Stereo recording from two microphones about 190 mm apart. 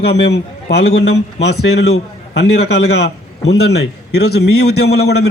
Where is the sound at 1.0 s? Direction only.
65° left (ahead or behind).